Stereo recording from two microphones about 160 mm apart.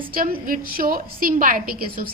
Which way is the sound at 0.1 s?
60° right (ahead or behind).